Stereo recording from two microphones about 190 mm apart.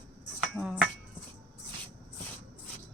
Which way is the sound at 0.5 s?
5° right (ahead or behind).